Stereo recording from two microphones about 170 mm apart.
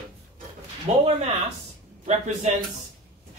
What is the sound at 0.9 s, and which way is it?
Speech, 40° right (ahead or behind).